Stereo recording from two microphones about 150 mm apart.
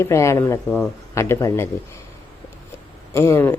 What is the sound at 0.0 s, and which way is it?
Speech, 20° left (ahead or behind).